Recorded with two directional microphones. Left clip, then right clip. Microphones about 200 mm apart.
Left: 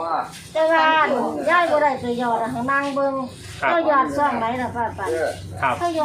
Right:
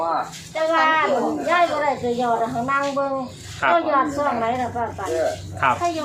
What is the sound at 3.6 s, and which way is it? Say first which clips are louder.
Speech: right 2 dB; 15° right (ahead or behind).